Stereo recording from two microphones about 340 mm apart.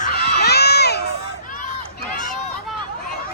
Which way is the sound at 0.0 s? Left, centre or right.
Left.